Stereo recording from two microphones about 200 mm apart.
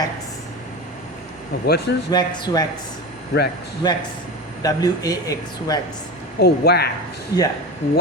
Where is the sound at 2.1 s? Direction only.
20° left (ahead or behind).